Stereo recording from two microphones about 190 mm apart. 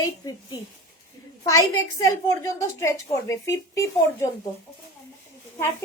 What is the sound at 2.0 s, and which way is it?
A woman's voice, 15° left (ahead or behind).